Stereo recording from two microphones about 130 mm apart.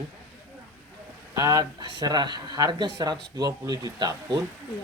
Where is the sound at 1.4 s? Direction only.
30° right (ahead or behind).